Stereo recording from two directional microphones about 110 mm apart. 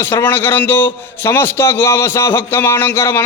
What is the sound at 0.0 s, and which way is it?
A man's voice, 20° left (ahead or behind).